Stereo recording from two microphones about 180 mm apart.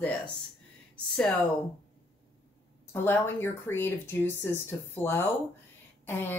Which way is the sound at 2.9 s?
10° left (ahead or behind).